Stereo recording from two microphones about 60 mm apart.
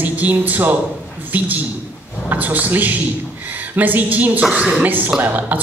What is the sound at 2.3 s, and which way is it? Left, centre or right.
A woman's voice, right.